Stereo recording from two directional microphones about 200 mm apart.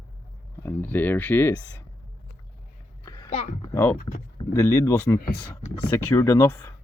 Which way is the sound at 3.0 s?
20° left (ahead or behind).